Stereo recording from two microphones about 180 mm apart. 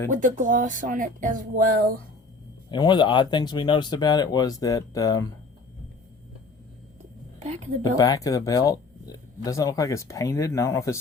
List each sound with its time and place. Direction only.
0.1 s speech: 45° right (ahead or behind)
2.6 s speech: 25° left (ahead or behind)
7.3 s a woman's voice: 40° right (ahead or behind)
7.9 s speech: 20° left (ahead or behind)